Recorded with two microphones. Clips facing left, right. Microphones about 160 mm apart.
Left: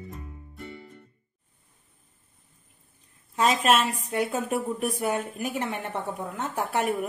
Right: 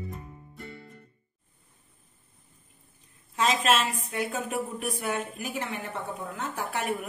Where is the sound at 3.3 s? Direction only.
50° left (ahead or behind).